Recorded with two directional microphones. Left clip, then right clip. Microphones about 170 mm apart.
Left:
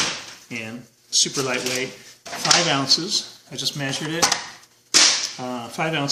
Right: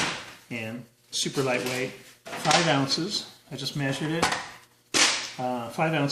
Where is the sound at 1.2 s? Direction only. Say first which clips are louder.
Left 2 dB; centre (ahead or behind).